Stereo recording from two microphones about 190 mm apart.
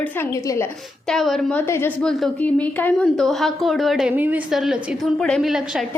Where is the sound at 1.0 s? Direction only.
Centre (ahead or behind).